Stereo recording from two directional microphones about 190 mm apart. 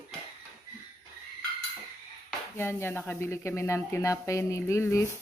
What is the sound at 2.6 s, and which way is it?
Speech, 10° left (ahead or behind).